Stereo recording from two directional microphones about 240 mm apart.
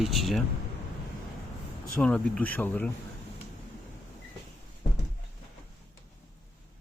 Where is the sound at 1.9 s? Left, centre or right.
Centre.